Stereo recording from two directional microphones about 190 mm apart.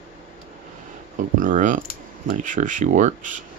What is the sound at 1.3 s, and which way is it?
Speech, 45° right (ahead or behind).